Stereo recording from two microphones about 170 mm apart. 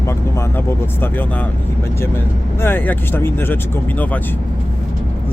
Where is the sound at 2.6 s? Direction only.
10° left (ahead or behind).